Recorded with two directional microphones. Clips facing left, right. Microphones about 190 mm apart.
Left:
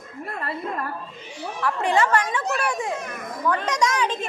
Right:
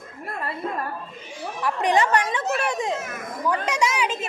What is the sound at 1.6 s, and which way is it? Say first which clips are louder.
A child's voice: even; 15° right (ahead or behind).